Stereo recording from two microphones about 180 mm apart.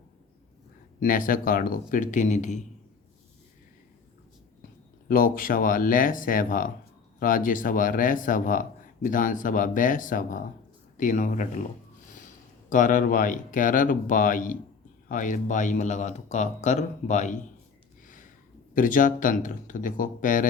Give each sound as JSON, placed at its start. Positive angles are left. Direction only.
{"t": 0.9, "sound": "speech", "side_deg": 50}
{"t": 5.0, "sound": "speech", "side_deg": 50}
{"t": 12.0, "sound": "a sound", "side_deg": 45}
{"t": 12.7, "sound": "speech", "side_deg": 45}
{"t": 18.0, "sound": "a sound", "side_deg": 45}
{"t": 18.7, "sound": "speech", "side_deg": 50}